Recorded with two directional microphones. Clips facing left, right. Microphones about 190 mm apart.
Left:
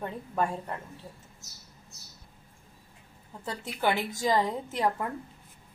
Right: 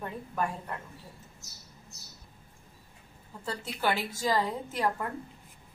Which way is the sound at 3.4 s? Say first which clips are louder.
Left 2 dB; 20° left (ahead or behind).